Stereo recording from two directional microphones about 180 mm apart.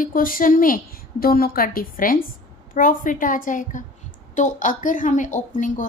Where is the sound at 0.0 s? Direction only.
50° left (ahead or behind).